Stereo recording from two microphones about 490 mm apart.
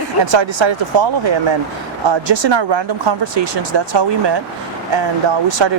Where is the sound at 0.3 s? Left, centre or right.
Right.